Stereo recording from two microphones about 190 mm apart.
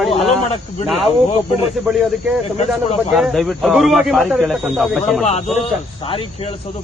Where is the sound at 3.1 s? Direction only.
Centre (ahead or behind).